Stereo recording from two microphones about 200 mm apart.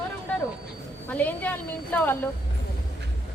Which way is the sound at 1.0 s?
10° left (ahead or behind).